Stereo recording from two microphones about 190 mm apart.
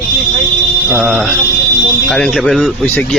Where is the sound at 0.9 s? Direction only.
5° right (ahead or behind).